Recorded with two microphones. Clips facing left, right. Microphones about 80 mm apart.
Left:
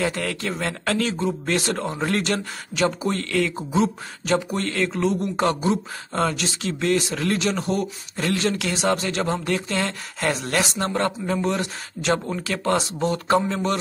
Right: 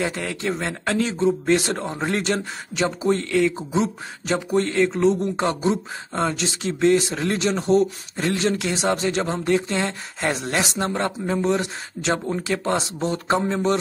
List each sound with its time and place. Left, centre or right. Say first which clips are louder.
0.0 s speech: even; centre